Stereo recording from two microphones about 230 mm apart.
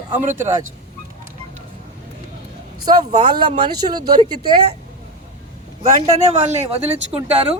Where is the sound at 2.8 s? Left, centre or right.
Centre.